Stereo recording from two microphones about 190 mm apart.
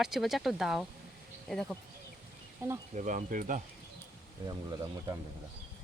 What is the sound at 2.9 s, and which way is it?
Speech, 45° right (ahead or behind).